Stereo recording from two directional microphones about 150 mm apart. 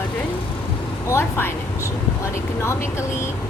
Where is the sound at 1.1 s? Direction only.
15° left (ahead or behind).